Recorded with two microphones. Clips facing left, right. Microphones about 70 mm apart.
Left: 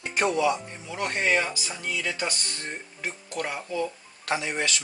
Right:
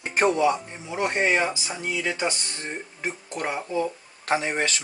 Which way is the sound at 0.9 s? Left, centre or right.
Right.